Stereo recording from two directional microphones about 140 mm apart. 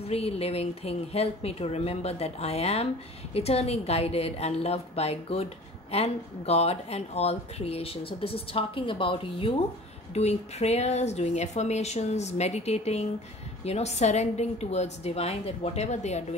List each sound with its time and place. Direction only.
0.0 s a woman's voice: 45° left (ahead or behind)
10.1 s a woman's voice: 50° left (ahead or behind)